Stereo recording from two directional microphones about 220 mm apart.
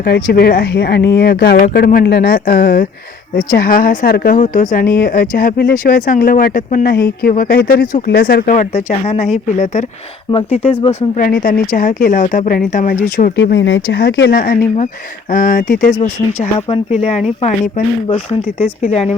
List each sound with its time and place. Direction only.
0.0 s speech: 45° left (ahead or behind)
11.3 s speech: 45° left (ahead or behind)
13.3 s speech: 55° left (ahead or behind)
16.0 s speech: 30° left (ahead or behind)